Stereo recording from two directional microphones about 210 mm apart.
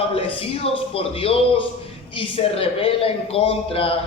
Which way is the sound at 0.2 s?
25° left (ahead or behind).